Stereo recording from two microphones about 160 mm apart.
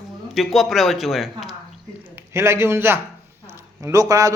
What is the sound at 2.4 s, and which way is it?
A man's voice, 15° right (ahead or behind).